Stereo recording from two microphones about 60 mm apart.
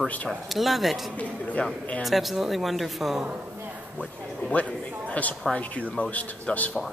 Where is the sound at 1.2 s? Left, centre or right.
Left.